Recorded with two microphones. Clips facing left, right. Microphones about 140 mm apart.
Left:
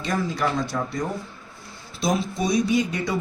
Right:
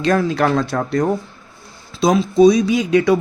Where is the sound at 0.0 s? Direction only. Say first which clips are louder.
Right 9 dB; 80° right.